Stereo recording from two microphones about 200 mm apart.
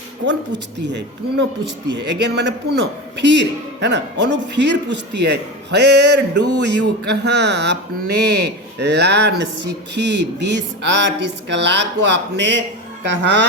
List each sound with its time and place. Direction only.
0.3 s a man's voice: 60° right (ahead or behind)